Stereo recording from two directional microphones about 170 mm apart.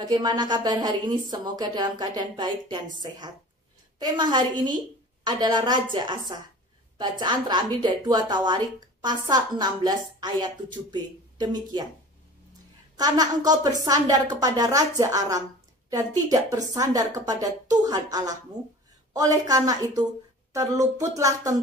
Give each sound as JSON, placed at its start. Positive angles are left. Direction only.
{"t": 0.0, "sound": "a woman's voice", "side_deg": -25}
{"t": 12.9, "sound": "a woman's voice", "side_deg": -20}